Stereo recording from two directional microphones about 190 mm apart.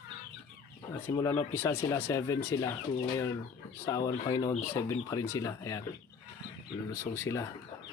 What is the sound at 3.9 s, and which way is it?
Speech, 20° left (ahead or behind).